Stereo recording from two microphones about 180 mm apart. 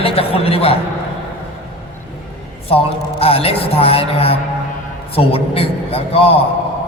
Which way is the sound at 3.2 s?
35° left (ahead or behind).